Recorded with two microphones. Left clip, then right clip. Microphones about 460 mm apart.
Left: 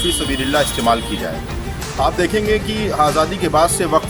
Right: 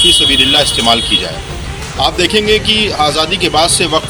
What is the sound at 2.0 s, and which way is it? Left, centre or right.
Speech, left.